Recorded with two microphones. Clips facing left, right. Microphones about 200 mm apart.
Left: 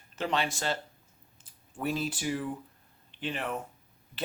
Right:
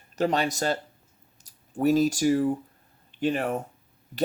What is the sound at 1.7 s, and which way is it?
Speech, 40° right (ahead or behind).